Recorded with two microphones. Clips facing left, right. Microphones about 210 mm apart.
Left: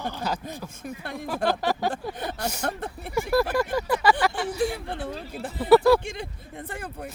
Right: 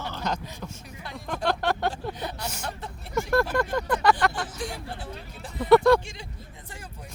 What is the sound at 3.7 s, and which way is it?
Speech, 5° left (ahead or behind).